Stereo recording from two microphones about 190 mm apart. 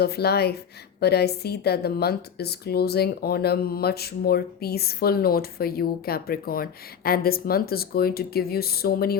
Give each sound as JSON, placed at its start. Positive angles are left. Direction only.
{"t": 0.0, "sound": "speech", "side_deg": 55}